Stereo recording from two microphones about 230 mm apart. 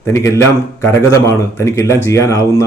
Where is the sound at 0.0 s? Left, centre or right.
Centre.